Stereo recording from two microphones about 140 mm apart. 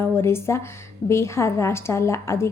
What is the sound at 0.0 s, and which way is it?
A woman's voice, 15° left (ahead or behind).